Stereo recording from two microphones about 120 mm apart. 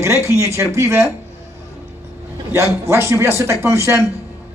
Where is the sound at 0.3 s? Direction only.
25° right (ahead or behind).